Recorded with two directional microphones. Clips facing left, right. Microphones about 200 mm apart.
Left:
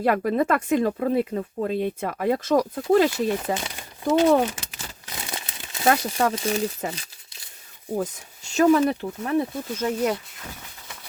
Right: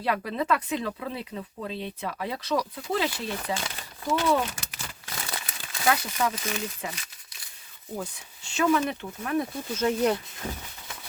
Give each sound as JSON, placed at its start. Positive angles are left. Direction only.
{"t": 0.0, "sound": "speech", "side_deg": 50}
{"t": 3.2, "sound": "speech", "side_deg": 20}
{"t": 5.0, "sound": "crumpling", "side_deg": 20}
{"t": 5.8, "sound": "speech", "side_deg": 40}
{"t": 7.9, "sound": "speech", "side_deg": 40}
{"t": 9.7, "sound": "speech", "side_deg": 10}